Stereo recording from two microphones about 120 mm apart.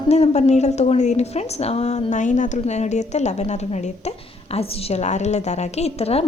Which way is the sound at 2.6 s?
70° left (ahead or behind).